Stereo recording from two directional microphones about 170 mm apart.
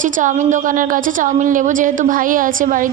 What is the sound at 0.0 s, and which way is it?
A woman's voice, 50° right (ahead or behind).